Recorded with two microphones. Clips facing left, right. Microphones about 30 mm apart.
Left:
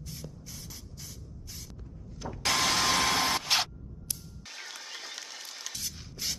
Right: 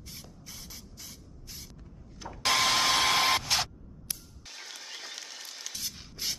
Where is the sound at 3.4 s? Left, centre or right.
Centre.